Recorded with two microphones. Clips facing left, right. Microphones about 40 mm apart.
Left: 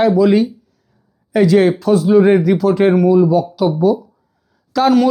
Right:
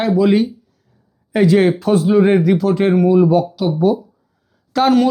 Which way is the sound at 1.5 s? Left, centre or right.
Centre.